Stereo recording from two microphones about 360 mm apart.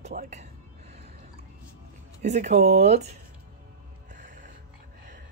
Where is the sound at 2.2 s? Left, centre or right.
Centre.